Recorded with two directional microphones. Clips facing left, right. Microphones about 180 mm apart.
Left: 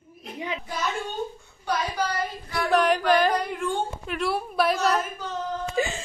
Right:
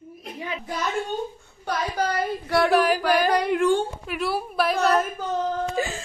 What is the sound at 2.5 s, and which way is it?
Singing, 70° right (ahead or behind).